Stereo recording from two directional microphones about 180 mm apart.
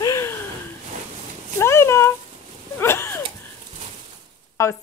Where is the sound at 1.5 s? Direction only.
15° left (ahead or behind).